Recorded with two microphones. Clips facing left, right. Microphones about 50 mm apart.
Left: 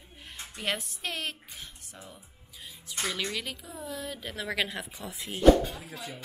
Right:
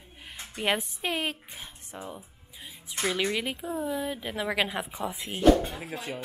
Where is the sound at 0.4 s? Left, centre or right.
Centre.